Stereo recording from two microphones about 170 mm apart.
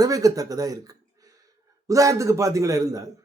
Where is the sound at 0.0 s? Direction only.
20° right (ahead or behind).